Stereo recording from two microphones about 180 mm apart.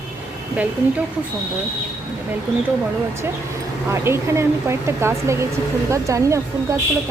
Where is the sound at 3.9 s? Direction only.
15° right (ahead or behind).